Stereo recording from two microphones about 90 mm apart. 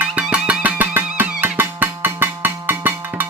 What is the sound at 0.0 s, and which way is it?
Music, 15° right (ahead or behind).